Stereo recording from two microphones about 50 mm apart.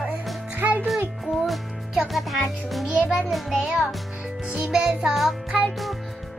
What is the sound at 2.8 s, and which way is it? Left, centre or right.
Music, right.